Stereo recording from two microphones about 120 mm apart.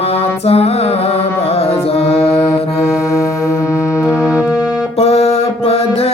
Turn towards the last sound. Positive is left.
turn(degrees=55)  # may be behind; listen again after turning